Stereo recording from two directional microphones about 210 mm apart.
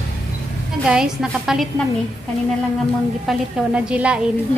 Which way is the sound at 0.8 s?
5° right (ahead or behind).